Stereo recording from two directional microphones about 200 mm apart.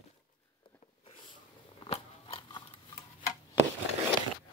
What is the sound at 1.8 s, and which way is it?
Biting, 30° left (ahead or behind).